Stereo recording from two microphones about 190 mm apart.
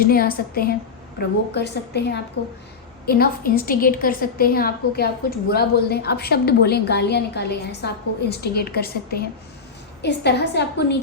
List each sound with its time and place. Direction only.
0.0 s a woman's voice: 50° left (ahead or behind); by 2.5 s 65° left (ahead or behind)
3.1 s a woman's voice: 50° left (ahead or behind)